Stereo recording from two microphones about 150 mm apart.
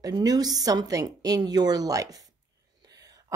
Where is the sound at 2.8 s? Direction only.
25° right (ahead or behind).